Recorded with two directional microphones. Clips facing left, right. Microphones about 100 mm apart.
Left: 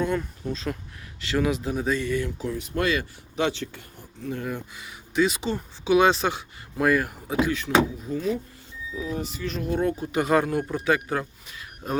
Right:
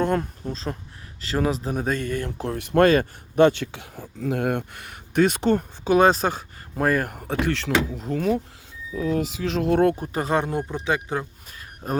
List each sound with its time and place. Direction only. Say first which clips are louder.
0.0 s speech: right 3 dB; 50° right (ahead or behind)
7.3 s speech: left 1 dB; 70° right (ahead or behind)
8.9 s speech: right 6 dB; 50° right (ahead or behind)
9.1 s speech: right 6 dB; 90° right; by 10.1 s 65° right (ahead or behind)
10.1 s speech: left 2 dB; 30° right (ahead or behind)
11.8 s speech: right 2 dB; 40° right (ahead or behind)